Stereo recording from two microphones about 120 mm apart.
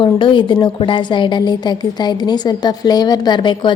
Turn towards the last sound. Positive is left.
turn(degrees=40)  # may be behind; listen again after turning